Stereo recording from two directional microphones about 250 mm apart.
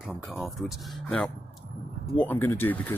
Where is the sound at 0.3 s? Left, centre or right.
Centre.